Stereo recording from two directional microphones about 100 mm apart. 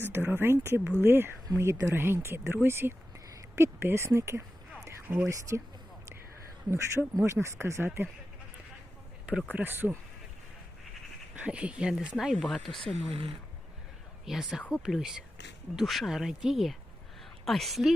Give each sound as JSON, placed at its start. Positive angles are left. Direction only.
{"t": 0.1, "sound": "speech", "side_deg": -20}
{"t": 4.9, "sound": "a sound", "side_deg": -20}
{"t": 5.3, "sound": "speech", "side_deg": -30}
{"t": 6.7, "sound": "speech", "side_deg": -25}
{"t": 9.2, "sound": "speech", "side_deg": -15}
{"t": 11.4, "sound": "speech", "side_deg": -10}
{"t": 13.1, "sound": "speech", "side_deg": -70}
{"t": 14.3, "sound": "speech", "side_deg": -5}